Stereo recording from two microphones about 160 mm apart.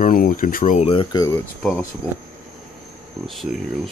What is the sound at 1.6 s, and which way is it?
Speech, 5° left (ahead or behind).